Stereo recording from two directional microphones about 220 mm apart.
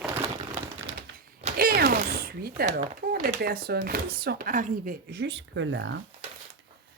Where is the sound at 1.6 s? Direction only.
40° right (ahead or behind).